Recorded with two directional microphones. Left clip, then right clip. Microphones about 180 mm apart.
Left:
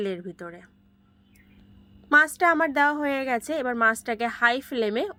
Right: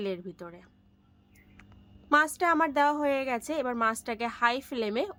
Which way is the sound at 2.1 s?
15° left (ahead or behind).